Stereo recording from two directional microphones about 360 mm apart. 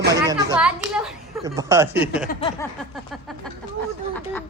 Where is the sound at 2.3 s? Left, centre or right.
Centre.